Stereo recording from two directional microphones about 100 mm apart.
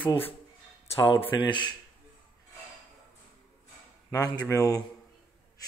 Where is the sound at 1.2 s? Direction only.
55° left (ahead or behind).